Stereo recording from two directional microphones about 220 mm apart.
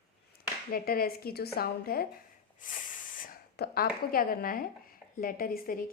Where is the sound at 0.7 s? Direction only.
40° left (ahead or behind).